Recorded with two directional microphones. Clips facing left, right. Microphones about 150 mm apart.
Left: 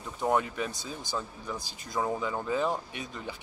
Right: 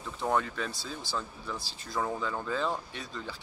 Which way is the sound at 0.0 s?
15° left (ahead or behind).